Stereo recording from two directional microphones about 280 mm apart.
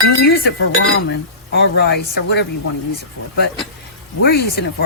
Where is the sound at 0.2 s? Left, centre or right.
Left.